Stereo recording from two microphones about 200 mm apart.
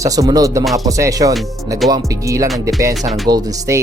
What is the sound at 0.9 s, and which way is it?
Speech, 15° right (ahead or behind).